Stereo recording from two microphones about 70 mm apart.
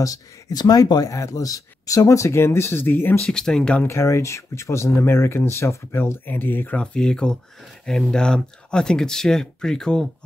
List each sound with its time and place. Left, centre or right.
0.0 s speech: left
1.1 s speech: left
3.3 s speech: centre
3.8 s speech: left
6.2 s speech: left
6.8 s speech: centre